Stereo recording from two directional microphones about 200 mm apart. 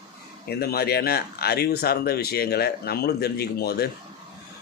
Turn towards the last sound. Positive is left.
turn(degrees=50)  # may be behind; listen again after turning